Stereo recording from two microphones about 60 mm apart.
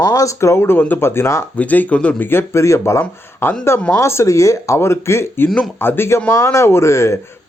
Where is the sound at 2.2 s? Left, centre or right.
Left.